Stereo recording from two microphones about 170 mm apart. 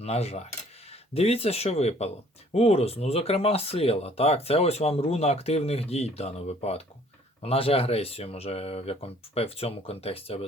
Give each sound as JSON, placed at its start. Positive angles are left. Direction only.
{"t": 0.0, "sound": "speech", "side_deg": 40}